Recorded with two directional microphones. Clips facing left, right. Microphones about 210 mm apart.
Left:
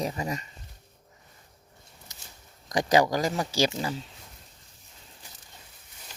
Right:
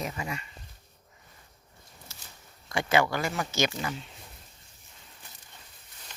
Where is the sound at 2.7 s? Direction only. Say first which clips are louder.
Left 3 dB; 35° left (ahead or behind).